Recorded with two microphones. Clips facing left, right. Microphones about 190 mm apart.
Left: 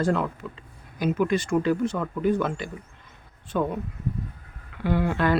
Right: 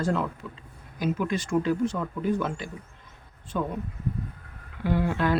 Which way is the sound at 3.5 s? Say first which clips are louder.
Left 4 dB; 70° left (ahead or behind).